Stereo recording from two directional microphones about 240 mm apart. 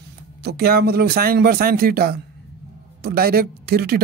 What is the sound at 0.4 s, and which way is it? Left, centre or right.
Speech, right.